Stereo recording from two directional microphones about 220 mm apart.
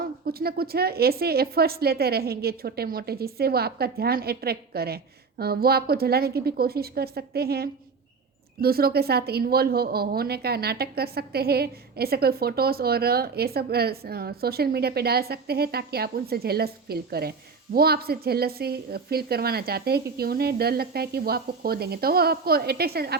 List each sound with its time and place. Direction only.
0.0 s a woman's voice: 45° right (ahead or behind)